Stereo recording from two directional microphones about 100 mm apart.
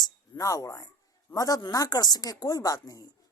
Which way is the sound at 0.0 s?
35° left (ahead or behind).